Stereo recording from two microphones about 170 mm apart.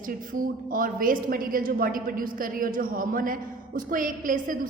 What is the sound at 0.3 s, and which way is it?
A woman's voice, 55° right (ahead or behind).